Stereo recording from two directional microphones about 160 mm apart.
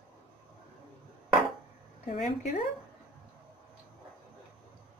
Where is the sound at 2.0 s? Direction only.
45° left (ahead or behind).